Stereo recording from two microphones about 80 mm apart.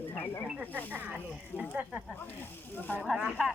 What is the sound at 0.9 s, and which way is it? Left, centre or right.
Speech, right.